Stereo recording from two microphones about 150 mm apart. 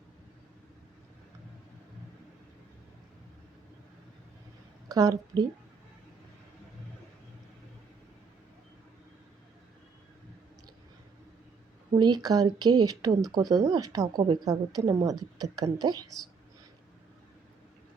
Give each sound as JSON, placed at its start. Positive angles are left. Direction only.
{"t": 4.9, "sound": "speech", "side_deg": -25}
{"t": 11.9, "sound": "speech", "side_deg": -25}